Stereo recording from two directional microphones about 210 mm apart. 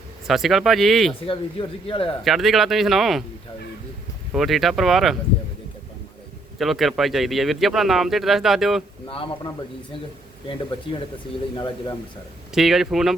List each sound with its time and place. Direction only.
0.3 s speech: centre (ahead or behind)
1.3 s speech: 25° left (ahead or behind)
2.2 s speech: centre (ahead or behind)
4.3 s speech: centre (ahead or behind)
6.6 s speech: centre (ahead or behind)
9.0 s speech: 25° left (ahead or behind)
11.5 s speech: 20° left (ahead or behind)
12.5 s speech: centre (ahead or behind)